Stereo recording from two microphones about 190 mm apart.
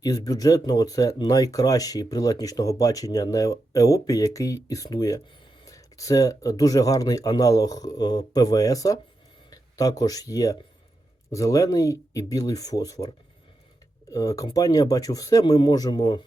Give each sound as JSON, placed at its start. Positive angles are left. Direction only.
{"t": 0.0, "sound": "speech", "side_deg": 20}
{"t": 14.1, "sound": "speech", "side_deg": 20}